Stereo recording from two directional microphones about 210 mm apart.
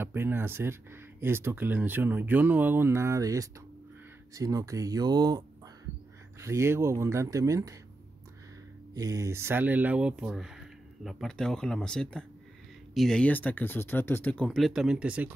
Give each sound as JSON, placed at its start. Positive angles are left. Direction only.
{"t": 0.0, "sound": "speech", "side_deg": -10}
{"t": 6.4, "sound": "speech", "side_deg": -15}
{"t": 8.9, "sound": "speech", "side_deg": -15}